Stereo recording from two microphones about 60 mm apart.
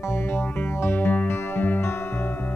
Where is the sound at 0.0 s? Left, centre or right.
Left.